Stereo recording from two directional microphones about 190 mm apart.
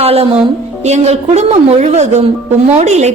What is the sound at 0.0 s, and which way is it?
Music, 30° right (ahead or behind).